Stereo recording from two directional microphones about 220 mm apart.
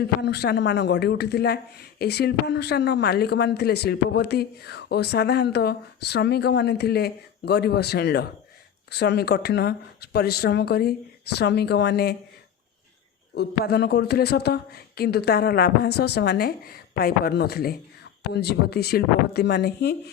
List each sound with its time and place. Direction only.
0.2 s speech: 50° left (ahead or behind)
13.3 s speech: 50° left (ahead or behind)